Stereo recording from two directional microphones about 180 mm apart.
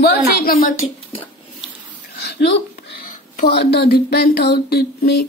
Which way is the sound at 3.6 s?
60° left (ahead or behind).